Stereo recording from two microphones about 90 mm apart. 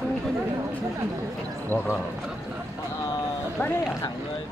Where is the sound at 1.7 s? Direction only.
35° right (ahead or behind).